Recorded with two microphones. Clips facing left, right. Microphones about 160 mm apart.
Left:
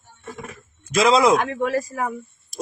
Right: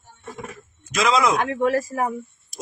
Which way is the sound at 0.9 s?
30° left (ahead or behind).